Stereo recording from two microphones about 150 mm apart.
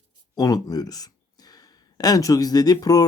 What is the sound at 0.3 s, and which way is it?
Speech, 25° left (ahead or behind).